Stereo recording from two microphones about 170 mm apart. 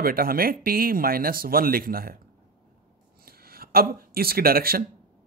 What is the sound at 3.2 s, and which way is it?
Speech, 60° right (ahead or behind).